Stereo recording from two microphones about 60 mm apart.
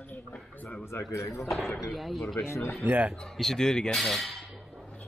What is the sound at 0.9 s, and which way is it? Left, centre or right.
Speech, left.